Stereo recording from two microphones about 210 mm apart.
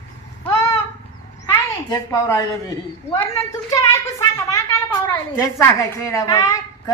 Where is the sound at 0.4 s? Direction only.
15° left (ahead or behind).